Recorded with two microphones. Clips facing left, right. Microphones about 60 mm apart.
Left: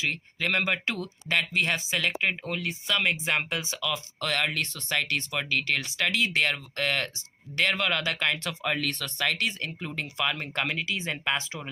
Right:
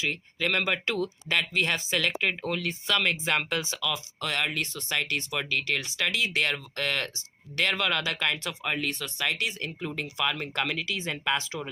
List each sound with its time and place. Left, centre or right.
0.0 s speech: left
3.8 s speech: left
8.4 s speech: left
9.5 s speech: left